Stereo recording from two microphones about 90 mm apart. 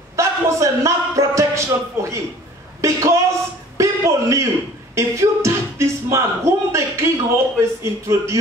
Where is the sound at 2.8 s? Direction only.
35° right (ahead or behind).